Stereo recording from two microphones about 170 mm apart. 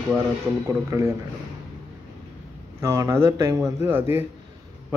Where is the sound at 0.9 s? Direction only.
15° right (ahead or behind).